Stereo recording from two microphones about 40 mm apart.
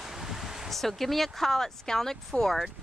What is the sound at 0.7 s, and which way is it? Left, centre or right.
Speech, centre.